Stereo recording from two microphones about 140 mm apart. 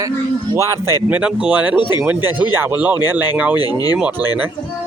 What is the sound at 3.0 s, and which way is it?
Speech, 30° left (ahead or behind).